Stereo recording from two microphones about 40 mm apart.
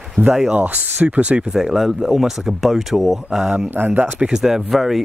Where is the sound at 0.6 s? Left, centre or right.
Right.